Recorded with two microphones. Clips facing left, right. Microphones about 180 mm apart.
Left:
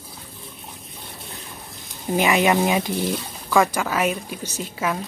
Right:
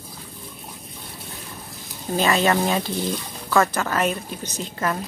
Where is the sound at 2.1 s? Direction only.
15° left (ahead or behind).